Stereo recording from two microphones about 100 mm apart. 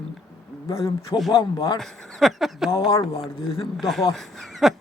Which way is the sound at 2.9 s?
65° left (ahead or behind).